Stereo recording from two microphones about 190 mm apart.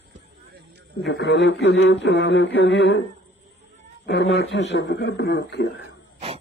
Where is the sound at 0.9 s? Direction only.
65° left (ahead or behind).